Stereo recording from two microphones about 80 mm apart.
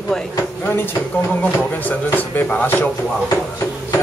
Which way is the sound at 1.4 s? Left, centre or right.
Left.